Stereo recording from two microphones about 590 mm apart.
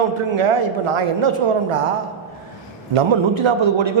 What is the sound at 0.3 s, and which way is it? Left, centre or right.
Speech, right.